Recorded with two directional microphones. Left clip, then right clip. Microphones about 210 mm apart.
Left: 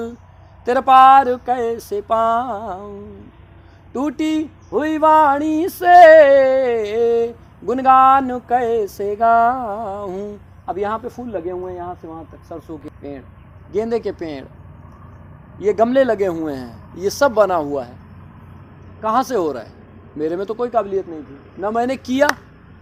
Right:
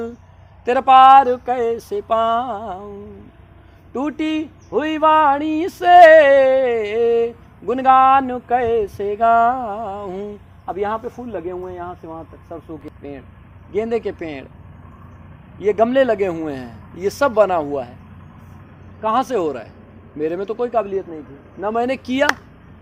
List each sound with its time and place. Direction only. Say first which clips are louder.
0.6 s speech: even; 25° right (ahead or behind)
3.9 s speech: left 1 dB; 30° right (ahead or behind)
11.4 s speech: left 2 dB; 40° right (ahead or behind)
15.5 s speech: even; 30° right (ahead or behind)
19.0 s speech: left 1 dB; 25° right (ahead or behind)